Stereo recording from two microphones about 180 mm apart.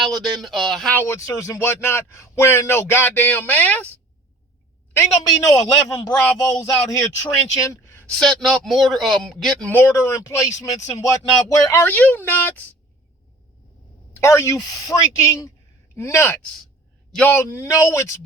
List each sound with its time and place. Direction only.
0.0 s speech: centre (ahead or behind)
4.9 s a man's voice: 20° left (ahead or behind)
8.2 s a man's voice: centre (ahead or behind)
14.2 s speech: 15° left (ahead or behind)